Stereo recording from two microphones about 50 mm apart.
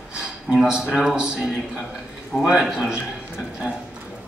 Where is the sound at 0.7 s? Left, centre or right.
Centre.